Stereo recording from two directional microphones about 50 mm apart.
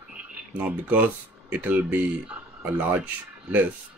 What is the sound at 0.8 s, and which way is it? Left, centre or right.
Speech, right.